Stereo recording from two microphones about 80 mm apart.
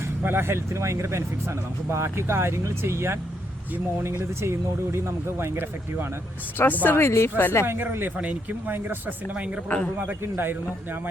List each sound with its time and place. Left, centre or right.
0.2 s speech: right
6.8 s speech: left
7.7 s speech: right
9.6 s a man's voice: centre
10.1 s speech: right